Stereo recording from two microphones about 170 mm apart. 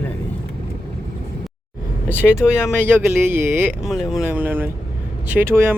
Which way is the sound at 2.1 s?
5° right (ahead or behind).